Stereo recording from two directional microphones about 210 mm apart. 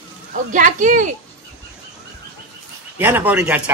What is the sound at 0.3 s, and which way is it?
Speech, 40° right (ahead or behind).